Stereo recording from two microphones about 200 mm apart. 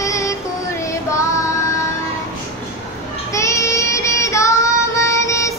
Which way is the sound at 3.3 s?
15° left (ahead or behind).